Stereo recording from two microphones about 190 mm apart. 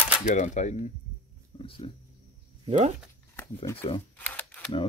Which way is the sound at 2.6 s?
35° right (ahead or behind).